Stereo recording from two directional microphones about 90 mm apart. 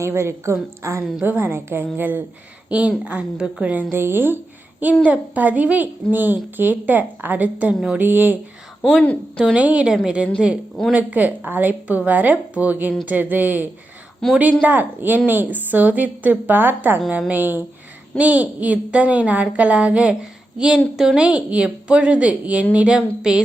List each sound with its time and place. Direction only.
0.0 s a woman's voice: 30° right (ahead or behind); by 3.8 s 15° right (ahead or behind)
3.9 s a woman's voice: 25° right (ahead or behind)
8.8 s a woman's voice: 5° left (ahead or behind)
9.4 s a woman's voice: 10° right (ahead or behind)
14.2 s a woman's voice: 5° left (ahead or behind)
14.6 s a woman's voice: 20° right (ahead or behind)